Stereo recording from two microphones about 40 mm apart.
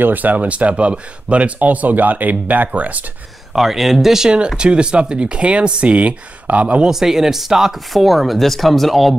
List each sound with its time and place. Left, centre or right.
0.0 s speech: right
0.5 s speech: right
3.5 s speech: centre
4.5 s speech: right
6.9 s speech: centre